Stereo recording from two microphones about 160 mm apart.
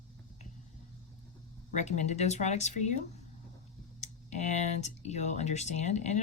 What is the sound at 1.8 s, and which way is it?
Speech, 45° left (ahead or behind).